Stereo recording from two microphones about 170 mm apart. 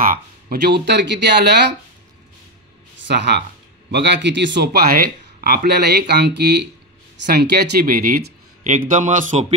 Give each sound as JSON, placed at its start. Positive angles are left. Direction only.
{"t": 0.0, "sound": "speech", "side_deg": -55}
{"t": 3.1, "sound": "speech", "side_deg": -90}